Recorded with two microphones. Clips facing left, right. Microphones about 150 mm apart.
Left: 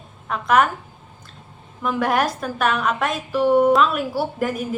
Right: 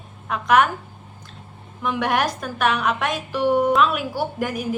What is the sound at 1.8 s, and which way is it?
A woman's voice, centre (ahead or behind).